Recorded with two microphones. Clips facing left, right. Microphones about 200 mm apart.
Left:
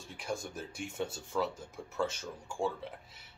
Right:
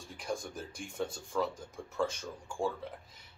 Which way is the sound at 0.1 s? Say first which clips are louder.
Even; centre (ahead or behind).